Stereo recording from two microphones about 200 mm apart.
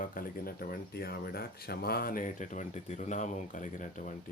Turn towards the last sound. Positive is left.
turn(degrees=40)  # may be behind; listen again after turning